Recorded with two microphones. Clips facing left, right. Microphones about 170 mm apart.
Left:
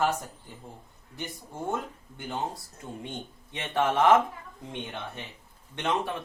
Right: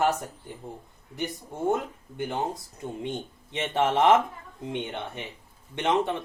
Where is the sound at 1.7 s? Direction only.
20° right (ahead or behind).